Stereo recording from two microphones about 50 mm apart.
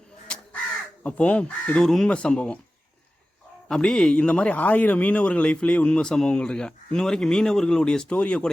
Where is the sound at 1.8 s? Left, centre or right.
Centre.